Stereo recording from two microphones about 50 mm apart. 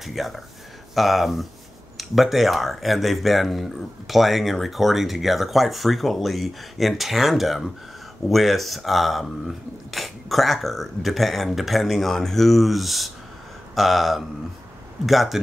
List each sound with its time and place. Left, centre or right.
0.0 s speech: centre